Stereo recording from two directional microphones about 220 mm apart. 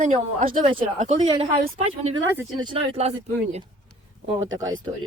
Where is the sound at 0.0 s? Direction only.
35° right (ahead or behind).